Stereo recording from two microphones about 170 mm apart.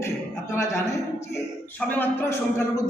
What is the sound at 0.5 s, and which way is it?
A man's voice, 15° left (ahead or behind).